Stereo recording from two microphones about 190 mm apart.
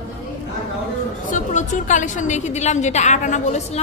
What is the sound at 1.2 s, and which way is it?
A woman's voice, 40° left (ahead or behind).